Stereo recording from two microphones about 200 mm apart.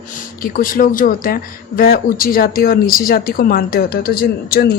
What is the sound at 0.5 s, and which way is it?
Speech, 45° left (ahead or behind).